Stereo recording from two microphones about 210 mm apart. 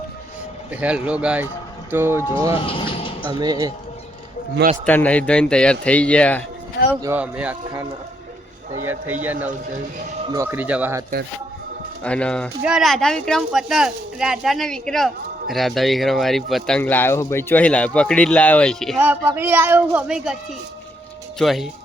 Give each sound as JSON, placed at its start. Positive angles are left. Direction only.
{"t": 0.7, "sound": "speech", "side_deg": -5}
{"t": 2.6, "sound": "speech", "side_deg": 25}
{"t": 3.2, "sound": "speech", "side_deg": -20}
{"t": 4.9, "sound": "speech", "side_deg": 5}
{"t": 6.9, "sound": "speech", "side_deg": -10}
{"t": 12.0, "sound": "speech", "side_deg": 5}
{"t": 18.9, "sound": "speech", "side_deg": -10}
{"t": 21.3, "sound": "speech", "side_deg": 0}